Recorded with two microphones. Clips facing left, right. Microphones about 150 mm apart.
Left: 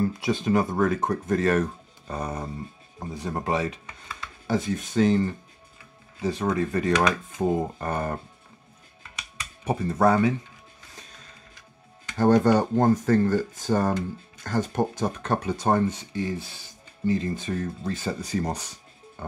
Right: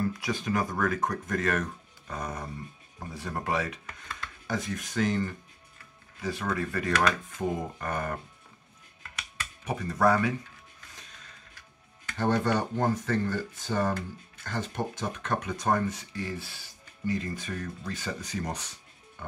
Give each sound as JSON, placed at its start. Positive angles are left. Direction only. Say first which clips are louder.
{"t": 0.1, "sound": "speech", "louder": "left 7 dB", "side_deg": 25}
{"t": 9.7, "sound": "speech", "louder": "left 4 dB", "side_deg": 25}
{"t": 12.4, "sound": "speech", "louder": "left 7 dB", "side_deg": 40}
{"t": 19.2, "sound": "music", "louder": "left 5 dB", "side_deg": 35}